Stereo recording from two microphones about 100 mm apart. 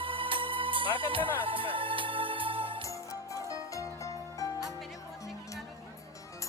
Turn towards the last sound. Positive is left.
turn(degrees=35)  # may be behind; listen again after turning